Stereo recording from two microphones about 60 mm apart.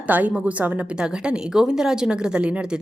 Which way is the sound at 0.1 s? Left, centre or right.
Right.